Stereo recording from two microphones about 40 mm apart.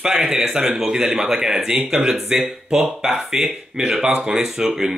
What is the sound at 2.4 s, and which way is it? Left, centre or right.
Speech, centre.